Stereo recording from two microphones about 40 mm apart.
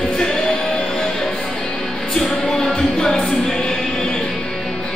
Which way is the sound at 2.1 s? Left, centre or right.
Centre.